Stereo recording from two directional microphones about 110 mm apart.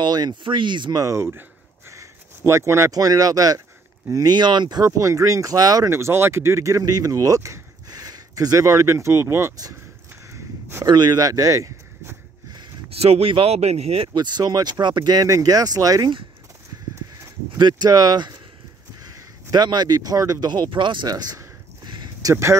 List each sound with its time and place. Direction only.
0.0 s speech: 40° right (ahead or behind)
1.0 s speech: 25° right (ahead or behind)
10.3 s a sound: 25° right (ahead or behind)
10.9 s a sound: 40° right (ahead or behind)
12.9 s speech: 65° right (ahead or behind)
14.1 s speech: 40° right (ahead or behind)
15.2 s speech: 30° right (ahead or behind)
17.6 s speech: 40° right (ahead or behind)
19.0 s a sound: 35° right (ahead or behind)
22.3 s speech: 25° right (ahead or behind)